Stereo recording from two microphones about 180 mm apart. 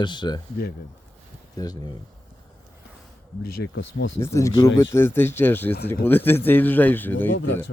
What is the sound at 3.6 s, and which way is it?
Speech, 90° left.